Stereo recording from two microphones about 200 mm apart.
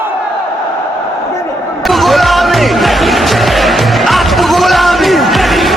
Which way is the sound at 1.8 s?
Centre (ahead or behind).